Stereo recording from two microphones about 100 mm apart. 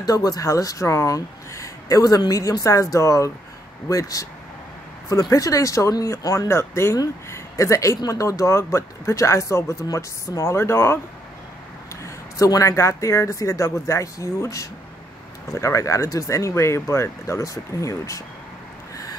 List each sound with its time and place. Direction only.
0.0 s speech: 40° left (ahead or behind)
5.3 s speech: 35° left (ahead or behind)
12.0 s speech: 35° left (ahead or behind)